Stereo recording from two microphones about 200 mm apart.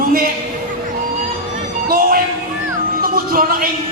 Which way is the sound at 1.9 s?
45° right (ahead or behind).